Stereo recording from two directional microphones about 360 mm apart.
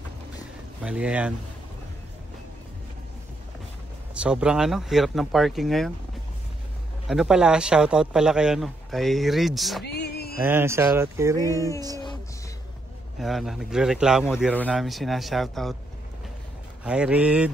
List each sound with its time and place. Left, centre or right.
0.8 s speech: centre
4.1 s speech: centre
7.1 s speech: centre
9.8 s music: left
10.4 s speech: centre
13.2 s speech: centre
16.8 s speech: centre